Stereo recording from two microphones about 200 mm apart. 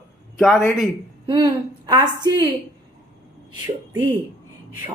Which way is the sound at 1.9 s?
20° right (ahead or behind).